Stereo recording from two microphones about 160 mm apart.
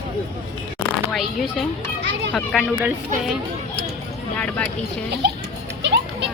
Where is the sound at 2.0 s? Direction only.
90° right.